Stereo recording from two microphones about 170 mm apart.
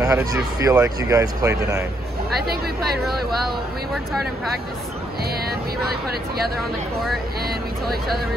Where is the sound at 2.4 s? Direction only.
65° right (ahead or behind).